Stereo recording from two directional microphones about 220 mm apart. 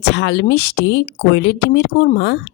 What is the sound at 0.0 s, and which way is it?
A woman's voice, 50° left (ahead or behind).